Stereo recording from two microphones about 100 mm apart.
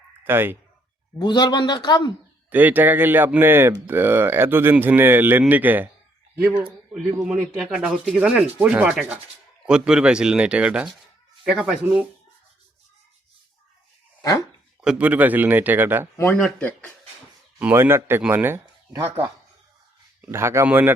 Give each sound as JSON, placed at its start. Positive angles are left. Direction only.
{"t": 0.3, "sound": "speech", "side_deg": -20}
{"t": 1.2, "sound": "speech", "side_deg": 45}
{"t": 2.5, "sound": "speech", "side_deg": -20}
{"t": 5.4, "sound": "sanding", "side_deg": -15}
{"t": 6.9, "sound": "a man's voice", "side_deg": -5}
{"t": 7.6, "sound": "sanding", "side_deg": -5}
{"t": 14.2, "sound": "dog", "side_deg": 35}
{"t": 14.8, "sound": "sanding", "side_deg": -10}
{"t": 16.6, "sound": "speech", "side_deg": 15}
{"t": 17.6, "sound": "speech", "side_deg": -20}
{"t": 20.3, "sound": "speech", "side_deg": -25}